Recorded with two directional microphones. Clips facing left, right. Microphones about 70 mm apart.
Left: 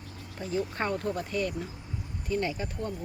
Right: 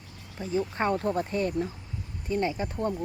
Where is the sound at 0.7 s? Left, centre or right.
Centre.